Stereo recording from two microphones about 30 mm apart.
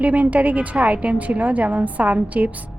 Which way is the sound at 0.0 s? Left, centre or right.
Right.